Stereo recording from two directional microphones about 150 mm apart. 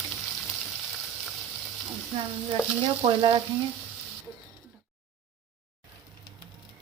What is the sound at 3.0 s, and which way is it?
Frying, 35° right (ahead or behind).